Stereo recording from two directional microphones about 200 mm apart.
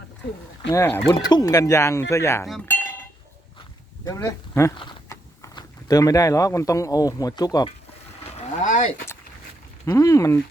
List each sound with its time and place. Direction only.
0.7 s speech: 15° left (ahead or behind)
4.0 s speech: 15° left (ahead or behind)
4.8 s a sound: 25° left (ahead or behind)
5.5 s speech: 15° left (ahead or behind)
8.2 s vehicle: 35° left (ahead or behind)
9.8 s speech: 15° left (ahead or behind)